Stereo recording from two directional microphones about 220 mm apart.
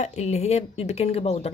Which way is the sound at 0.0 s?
30° left (ahead or behind).